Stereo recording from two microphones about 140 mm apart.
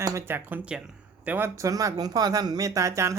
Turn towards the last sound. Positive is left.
turn(degrees=-20)  # may be behind; listen again after turning